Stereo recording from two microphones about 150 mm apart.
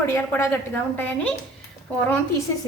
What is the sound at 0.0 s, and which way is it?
A woman's voice, 15° left (ahead or behind).